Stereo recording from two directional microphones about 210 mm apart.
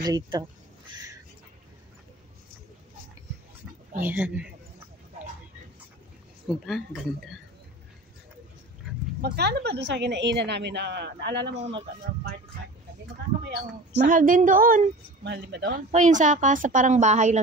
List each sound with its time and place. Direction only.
0.0 s speech: 20° right (ahead or behind)
4.0 s speech: 10° right (ahead or behind)
6.4 s speech: centre (ahead or behind)
9.2 s a woman's voice: 50° right (ahead or behind)
13.4 s a woman's voice: 50° right (ahead or behind)
15.9 s a woman's voice: 35° right (ahead or behind)